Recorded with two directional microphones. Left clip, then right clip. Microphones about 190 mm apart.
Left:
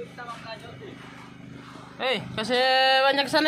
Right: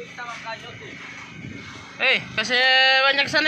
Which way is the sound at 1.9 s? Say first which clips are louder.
Right 7 dB; 20° left (ahead or behind).